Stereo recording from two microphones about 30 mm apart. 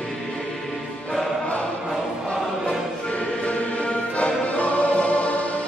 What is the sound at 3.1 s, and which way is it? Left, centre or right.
Music, left.